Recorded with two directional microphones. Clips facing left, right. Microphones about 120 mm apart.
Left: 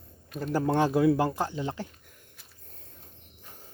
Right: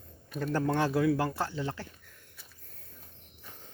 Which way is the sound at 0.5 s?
20° left (ahead or behind).